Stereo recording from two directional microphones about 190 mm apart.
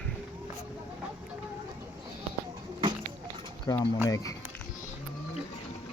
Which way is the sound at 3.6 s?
20° left (ahead or behind).